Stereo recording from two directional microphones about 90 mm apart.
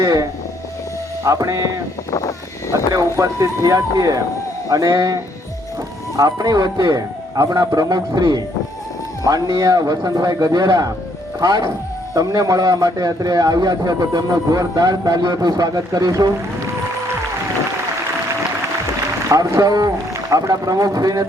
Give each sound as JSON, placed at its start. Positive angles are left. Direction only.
{"t": 1.2, "sound": "speech", "side_deg": -40}
{"t": 2.0, "sound": "speech", "side_deg": 40}
{"t": 2.9, "sound": "a man's voice", "side_deg": -35}
{"t": 19.3, "sound": "a man's voice", "side_deg": -40}